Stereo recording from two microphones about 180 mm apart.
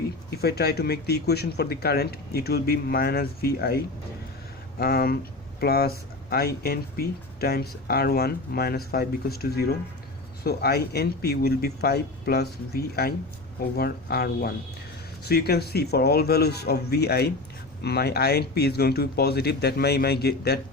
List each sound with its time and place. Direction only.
0.4 s speech: 60° left (ahead or behind)